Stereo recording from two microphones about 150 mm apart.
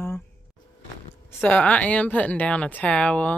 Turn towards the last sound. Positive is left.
turn(degrees=10)  # may be behind; listen again after turning